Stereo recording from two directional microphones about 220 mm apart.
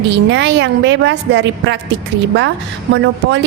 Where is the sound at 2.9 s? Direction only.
55° right (ahead or behind).